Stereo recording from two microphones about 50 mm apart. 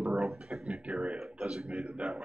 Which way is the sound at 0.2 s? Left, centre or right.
Centre.